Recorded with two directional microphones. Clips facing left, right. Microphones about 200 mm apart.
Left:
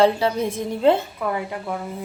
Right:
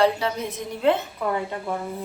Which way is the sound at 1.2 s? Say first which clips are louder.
Even; 10° left (ahead or behind).